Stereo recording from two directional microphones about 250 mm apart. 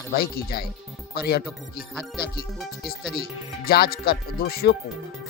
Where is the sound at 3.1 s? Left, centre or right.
Left.